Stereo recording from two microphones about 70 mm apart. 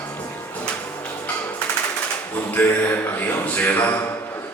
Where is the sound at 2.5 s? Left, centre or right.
Left.